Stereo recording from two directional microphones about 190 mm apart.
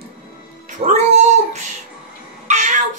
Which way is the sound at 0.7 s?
40° right (ahead or behind).